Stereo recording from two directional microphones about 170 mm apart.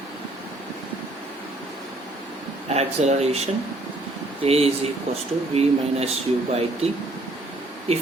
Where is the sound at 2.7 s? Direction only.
40° right (ahead or behind).